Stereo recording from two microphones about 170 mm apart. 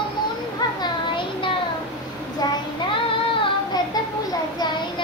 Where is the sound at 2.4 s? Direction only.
20° left (ahead or behind).